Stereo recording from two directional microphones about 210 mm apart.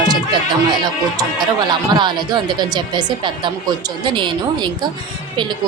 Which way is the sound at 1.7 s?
20° right (ahead or behind).